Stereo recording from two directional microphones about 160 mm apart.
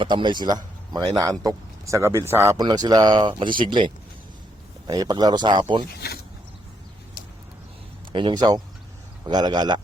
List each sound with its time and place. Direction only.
0.0 s a man's voice: 30° right (ahead or behind)
8.1 s a man's voice: 30° right (ahead or behind)